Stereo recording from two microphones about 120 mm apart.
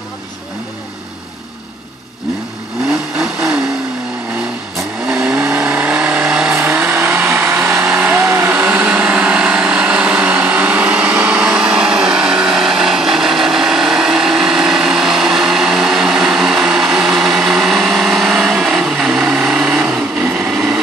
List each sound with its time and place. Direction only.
2.9 s vehicle: 5° right (ahead or behind)
5.0 s vehicle: 10° right (ahead or behind)